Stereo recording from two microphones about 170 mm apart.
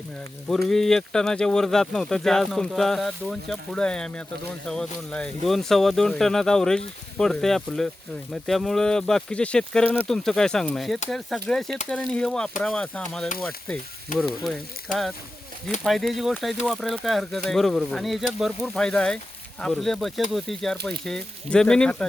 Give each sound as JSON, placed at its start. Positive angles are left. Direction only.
{"t": 0.7, "sound": "speech", "side_deg": 5}
{"t": 13.2, "sound": "speech", "side_deg": 50}
{"t": 15.8, "sound": "speech", "side_deg": 0}